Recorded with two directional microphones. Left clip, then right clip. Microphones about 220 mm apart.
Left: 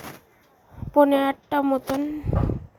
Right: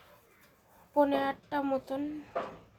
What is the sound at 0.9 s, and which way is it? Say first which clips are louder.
Speech: left 9 dB; 30° left (ahead or behind).